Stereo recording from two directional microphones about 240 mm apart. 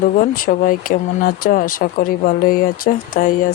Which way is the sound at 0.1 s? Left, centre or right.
Left.